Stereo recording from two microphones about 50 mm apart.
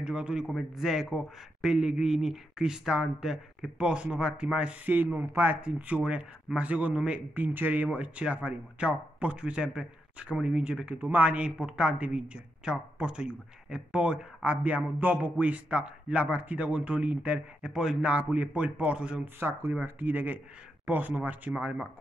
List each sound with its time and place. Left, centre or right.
0.0 s speech: centre
0.7 s speech: centre
4.8 s speech: right
5.6 s speech: right
7.3 s speech: right
11.0 s speech: right
11.2 s speech: centre
17.6 s speech: centre
18.0 s speech: right
19.2 s speech: right
19.7 s speech: right